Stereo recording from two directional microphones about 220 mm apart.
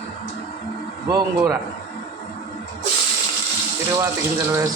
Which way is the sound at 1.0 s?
15° right (ahead or behind).